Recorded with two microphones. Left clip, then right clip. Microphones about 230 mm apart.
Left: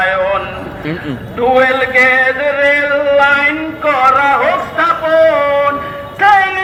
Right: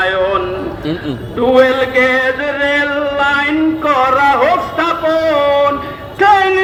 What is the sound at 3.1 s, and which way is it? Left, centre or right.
Music, right.